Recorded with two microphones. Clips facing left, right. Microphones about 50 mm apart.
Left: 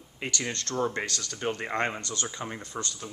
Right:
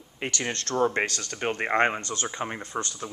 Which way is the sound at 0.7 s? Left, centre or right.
Right.